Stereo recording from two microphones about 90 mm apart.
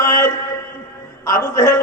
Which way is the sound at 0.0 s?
35° left (ahead or behind).